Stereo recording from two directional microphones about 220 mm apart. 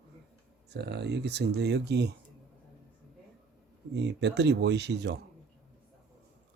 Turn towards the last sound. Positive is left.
turn(degrees=-50)  # may be behind; listen again after turning